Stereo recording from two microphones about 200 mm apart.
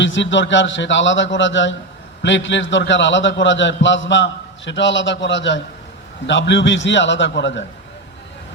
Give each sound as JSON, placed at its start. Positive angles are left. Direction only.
{"t": 0.0, "sound": "a man's voice", "side_deg": 65}